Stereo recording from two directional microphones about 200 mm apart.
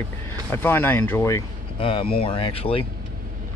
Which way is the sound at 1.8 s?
25° left (ahead or behind).